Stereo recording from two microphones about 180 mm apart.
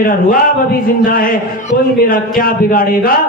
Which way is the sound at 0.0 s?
50° left (ahead or behind).